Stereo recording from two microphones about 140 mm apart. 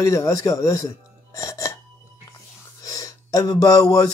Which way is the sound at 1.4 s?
20° left (ahead or behind).